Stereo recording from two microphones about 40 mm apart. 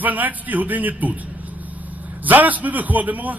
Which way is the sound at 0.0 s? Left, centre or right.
Right.